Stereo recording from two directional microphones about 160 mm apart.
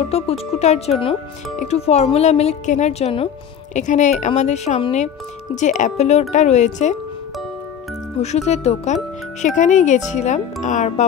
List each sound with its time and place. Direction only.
0.1 s speech: 40° left (ahead or behind)
3.7 s speech: 50° left (ahead or behind)
8.2 s speech: 45° left (ahead or behind)